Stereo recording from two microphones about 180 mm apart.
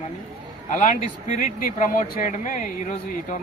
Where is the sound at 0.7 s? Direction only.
45° left (ahead or behind).